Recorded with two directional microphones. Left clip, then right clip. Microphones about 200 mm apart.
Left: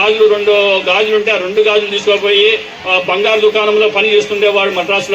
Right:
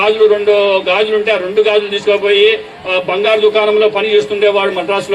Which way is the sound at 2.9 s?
30° left (ahead or behind).